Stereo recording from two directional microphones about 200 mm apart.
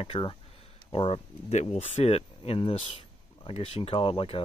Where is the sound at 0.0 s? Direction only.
25° left (ahead or behind).